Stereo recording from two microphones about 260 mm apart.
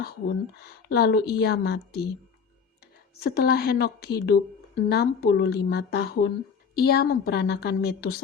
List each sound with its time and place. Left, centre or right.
0.0 s speech: left
3.2 s speech: left